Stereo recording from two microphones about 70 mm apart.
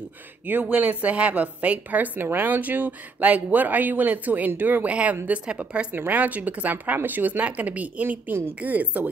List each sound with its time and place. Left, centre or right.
0.5 s a man's voice: right